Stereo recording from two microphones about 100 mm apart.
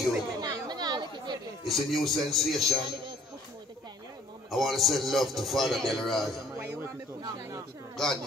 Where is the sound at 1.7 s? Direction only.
Centre (ahead or behind).